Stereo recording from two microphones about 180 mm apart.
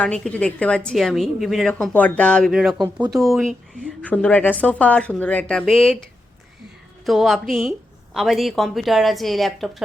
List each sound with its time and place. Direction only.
0.0 s a woman's voice: 5° left (ahead or behind)
2.8 s speech: 20° right (ahead or behind)
3.3 s a woman's voice: centre (ahead or behind)